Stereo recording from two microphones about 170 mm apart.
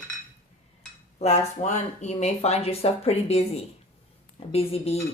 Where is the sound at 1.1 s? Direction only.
40° left (ahead or behind).